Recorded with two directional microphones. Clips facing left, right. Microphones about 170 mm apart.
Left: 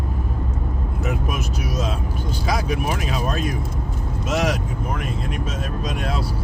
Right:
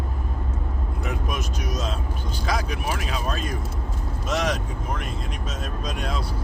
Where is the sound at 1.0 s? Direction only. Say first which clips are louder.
Left 3 dB; 5° left (ahead or behind).